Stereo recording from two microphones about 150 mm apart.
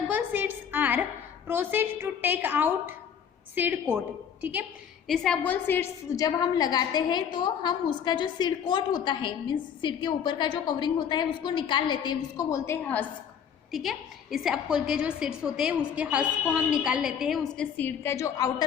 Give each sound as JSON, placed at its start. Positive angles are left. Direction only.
{"t": 0.1, "sound": "a sound", "side_deg": -10}
{"t": 1.5, "sound": "a woman's voice", "side_deg": -15}
{"t": 5.0, "sound": "a woman's voice", "side_deg": 5}
{"t": 13.7, "sound": "a woman's voice", "side_deg": 0}
{"t": 17.7, "sound": "a woman's voice", "side_deg": 15}